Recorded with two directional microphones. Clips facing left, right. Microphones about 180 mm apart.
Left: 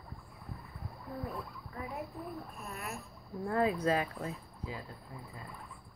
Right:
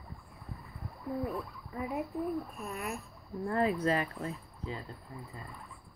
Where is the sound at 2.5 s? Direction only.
15° right (ahead or behind).